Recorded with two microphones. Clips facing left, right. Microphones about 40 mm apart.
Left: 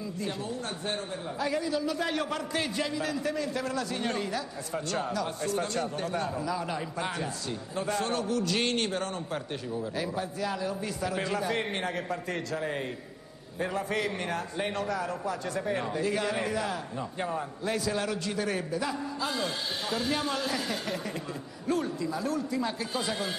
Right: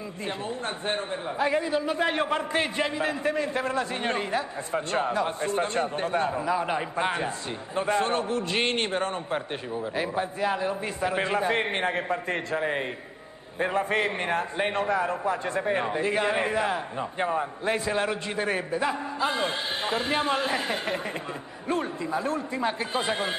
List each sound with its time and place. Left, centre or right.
0.2 s a man's voice: right